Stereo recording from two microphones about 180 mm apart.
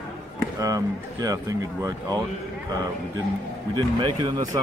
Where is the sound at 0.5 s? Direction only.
20° right (ahead or behind).